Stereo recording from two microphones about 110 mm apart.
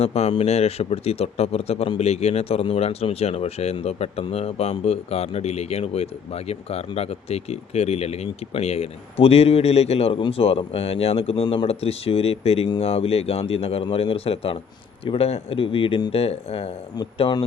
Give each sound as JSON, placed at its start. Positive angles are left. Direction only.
{"t": 0.0, "sound": "speech", "side_deg": 65}
{"t": 11.4, "sound": "speech", "side_deg": 50}
{"t": 17.2, "sound": "a man's voice", "side_deg": 50}